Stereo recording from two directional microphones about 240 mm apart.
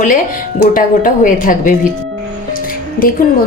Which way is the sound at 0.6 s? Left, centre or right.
Left.